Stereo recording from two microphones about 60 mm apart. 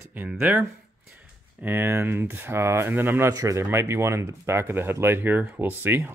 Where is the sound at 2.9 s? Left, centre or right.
Right.